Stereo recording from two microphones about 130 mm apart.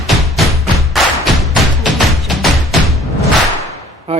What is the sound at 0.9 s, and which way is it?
Thump, centre (ahead or behind).